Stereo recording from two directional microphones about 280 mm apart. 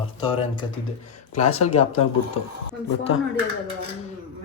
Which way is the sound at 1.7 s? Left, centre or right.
Left.